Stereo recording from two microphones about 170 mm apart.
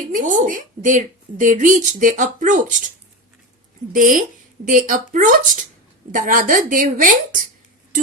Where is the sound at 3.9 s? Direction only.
50° right (ahead or behind).